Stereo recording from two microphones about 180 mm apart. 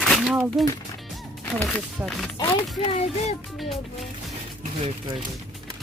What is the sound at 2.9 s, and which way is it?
Speech, 35° left (ahead or behind).